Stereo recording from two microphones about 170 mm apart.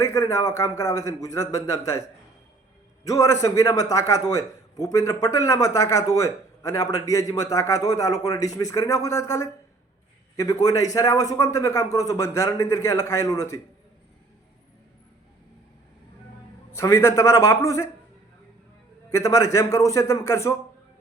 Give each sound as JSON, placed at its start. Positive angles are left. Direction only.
{"t": 0.0, "sound": "a man's voice", "side_deg": 20}
{"t": 16.7, "sound": "a man's voice", "side_deg": 15}
{"t": 19.1, "sound": "a man's voice", "side_deg": 20}